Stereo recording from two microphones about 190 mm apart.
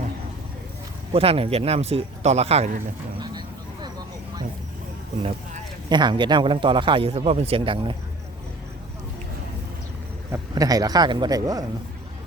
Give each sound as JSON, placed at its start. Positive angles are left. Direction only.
{"t": 1.1, "sound": "speech", "side_deg": -30}
{"t": 3.2, "sound": "vehicle", "side_deg": -25}
{"t": 5.9, "sound": "a man's voice", "side_deg": -25}
{"t": 10.3, "sound": "a man's voice", "side_deg": -20}